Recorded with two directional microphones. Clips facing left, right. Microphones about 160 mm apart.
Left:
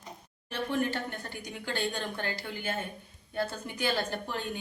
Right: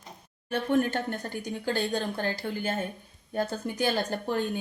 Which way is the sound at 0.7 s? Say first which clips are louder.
Right 6 dB; 45° right (ahead or behind).